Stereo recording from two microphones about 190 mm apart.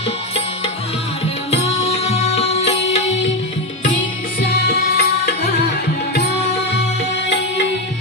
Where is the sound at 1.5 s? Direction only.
35° left (ahead or behind).